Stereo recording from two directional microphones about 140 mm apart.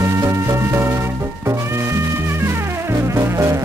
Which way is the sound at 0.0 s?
20° right (ahead or behind).